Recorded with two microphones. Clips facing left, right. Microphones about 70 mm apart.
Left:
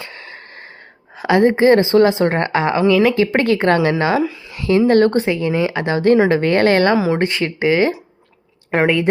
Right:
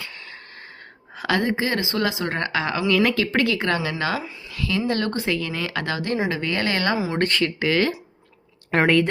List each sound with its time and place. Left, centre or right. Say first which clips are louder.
0.0 s a sound: left 4 dB; left
1.1 s a woman's voice: left 9 dB; left
2.9 s speech: left 4 dB; centre
3.2 s a woman's voice: left 6 dB; left
4.5 s a woman's voice: left 11 dB; left
5.2 s speech: left 8 dB; left
6.2 s a woman's voice: left 10 dB; left
7.1 s speech: left 4 dB; centre